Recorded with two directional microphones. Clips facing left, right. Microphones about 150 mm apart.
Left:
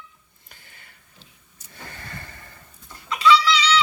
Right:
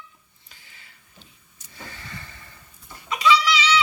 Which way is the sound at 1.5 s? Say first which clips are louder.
Even; 50° left (ahead or behind).